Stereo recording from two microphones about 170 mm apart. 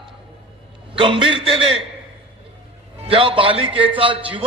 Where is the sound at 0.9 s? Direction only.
30° right (ahead or behind).